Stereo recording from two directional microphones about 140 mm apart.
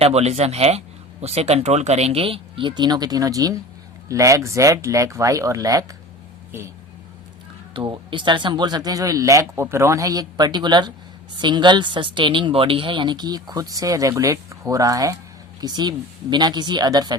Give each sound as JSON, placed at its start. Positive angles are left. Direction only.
{"t": 0.0, "sound": "speech", "side_deg": -50}
{"t": 7.7, "sound": "speech", "side_deg": -35}